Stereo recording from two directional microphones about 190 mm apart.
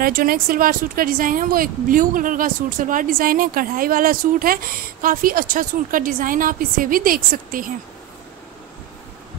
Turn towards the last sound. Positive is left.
turn(degrees=-50)  # may be behind; listen again after turning